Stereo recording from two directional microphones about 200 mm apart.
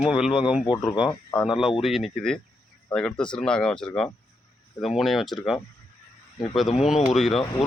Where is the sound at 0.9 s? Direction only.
20° left (ahead or behind).